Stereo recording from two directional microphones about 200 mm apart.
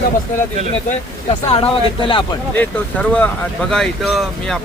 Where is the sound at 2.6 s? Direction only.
5° left (ahead or behind).